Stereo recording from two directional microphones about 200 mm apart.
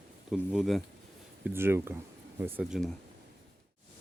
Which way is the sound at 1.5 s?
10° right (ahead or behind).